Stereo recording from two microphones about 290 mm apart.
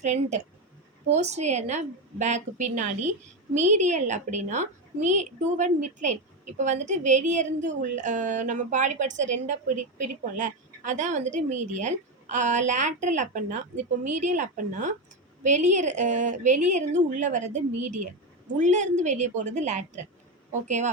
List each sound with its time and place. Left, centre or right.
0.0 s a woman's voice: right